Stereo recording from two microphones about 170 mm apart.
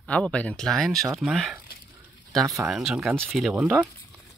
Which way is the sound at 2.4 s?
20° right (ahead or behind).